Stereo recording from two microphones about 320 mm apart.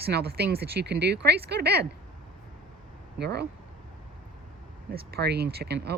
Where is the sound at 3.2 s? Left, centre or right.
Right.